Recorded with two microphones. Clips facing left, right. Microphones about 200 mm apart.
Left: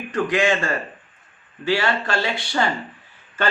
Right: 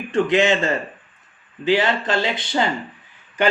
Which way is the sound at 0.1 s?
25° right (ahead or behind).